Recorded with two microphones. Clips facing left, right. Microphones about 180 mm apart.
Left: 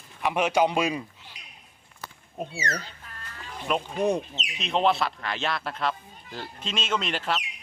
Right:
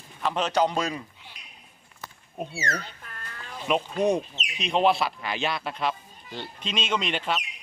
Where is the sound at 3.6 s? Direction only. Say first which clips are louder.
Right 2 dB; 5° right (ahead or behind).